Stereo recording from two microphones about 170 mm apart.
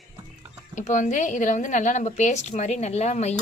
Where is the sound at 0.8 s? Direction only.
45° left (ahead or behind).